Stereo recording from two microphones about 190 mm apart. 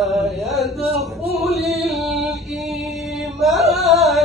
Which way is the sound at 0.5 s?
Centre (ahead or behind).